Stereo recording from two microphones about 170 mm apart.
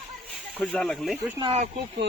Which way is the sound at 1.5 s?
40° right (ahead or behind).